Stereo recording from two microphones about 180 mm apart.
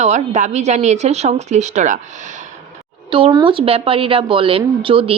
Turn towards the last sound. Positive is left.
turn(degrees=-30)  # may be behind; listen again after turning